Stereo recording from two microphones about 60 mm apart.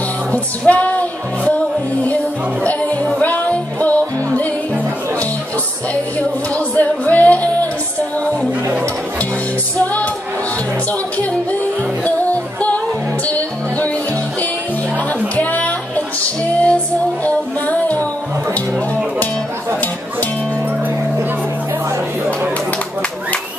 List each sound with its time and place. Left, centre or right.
0.3 s music: left
2.6 s music: left
6.7 s music: left
12.0 s music: left
15.3 s music: left